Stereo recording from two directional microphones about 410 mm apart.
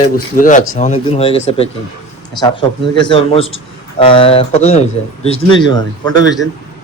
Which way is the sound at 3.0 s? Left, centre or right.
Centre.